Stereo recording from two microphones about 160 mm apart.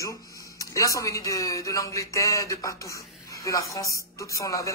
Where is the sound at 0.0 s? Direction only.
20° left (ahead or behind).